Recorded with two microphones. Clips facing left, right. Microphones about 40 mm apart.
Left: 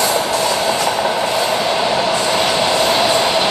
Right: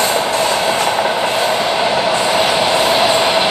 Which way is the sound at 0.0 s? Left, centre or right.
Right.